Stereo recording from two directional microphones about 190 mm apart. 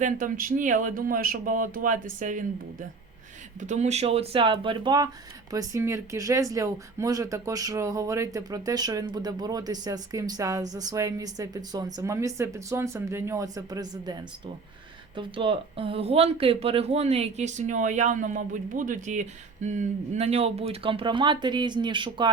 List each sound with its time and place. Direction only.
0.0 s speech: 45° right (ahead or behind)
3.6 s speech: 35° right (ahead or behind)